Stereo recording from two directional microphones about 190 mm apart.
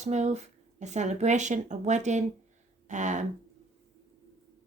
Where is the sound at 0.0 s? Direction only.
35° right (ahead or behind).